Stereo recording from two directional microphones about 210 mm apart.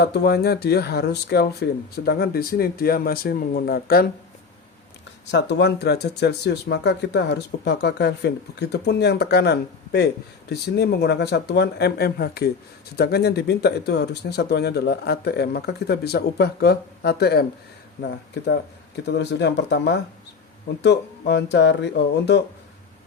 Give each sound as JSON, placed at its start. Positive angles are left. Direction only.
{"t": 0.0, "sound": "speech", "side_deg": 50}
{"t": 5.3, "sound": "speech", "side_deg": 55}